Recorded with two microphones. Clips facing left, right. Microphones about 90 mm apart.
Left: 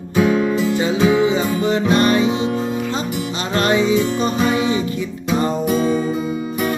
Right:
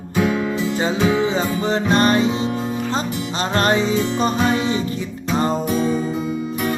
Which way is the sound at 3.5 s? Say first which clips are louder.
Left 2 dB; 40° right (ahead or behind).